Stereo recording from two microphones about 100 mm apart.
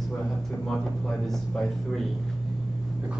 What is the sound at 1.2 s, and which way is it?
Speech, 5° left (ahead or behind).